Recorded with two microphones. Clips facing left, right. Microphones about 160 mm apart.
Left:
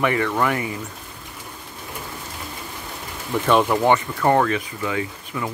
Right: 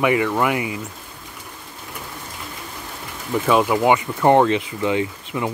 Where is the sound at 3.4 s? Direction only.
5° right (ahead or behind).